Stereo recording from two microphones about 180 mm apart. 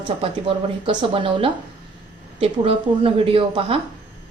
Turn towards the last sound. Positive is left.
turn(degrees=-30)  # may be behind; listen again after turning